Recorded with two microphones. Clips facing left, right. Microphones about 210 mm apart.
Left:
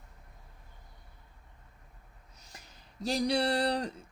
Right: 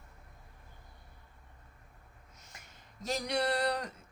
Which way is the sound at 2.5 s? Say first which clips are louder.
Left 3 dB; 35° left (ahead or behind).